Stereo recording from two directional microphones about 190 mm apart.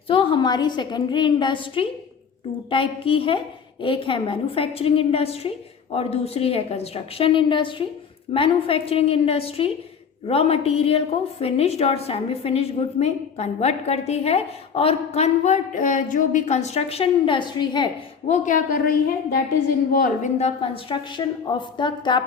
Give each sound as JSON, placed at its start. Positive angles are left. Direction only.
{"t": 0.1, "sound": "a woman's voice", "side_deg": 25}
{"t": 18.3, "sound": "a woman's voice", "side_deg": 45}
{"t": 20.4, "sound": "a woman's voice", "side_deg": 25}